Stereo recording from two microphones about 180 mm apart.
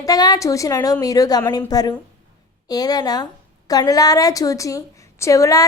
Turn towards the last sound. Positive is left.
turn(degrees=20)  # may be behind; listen again after turning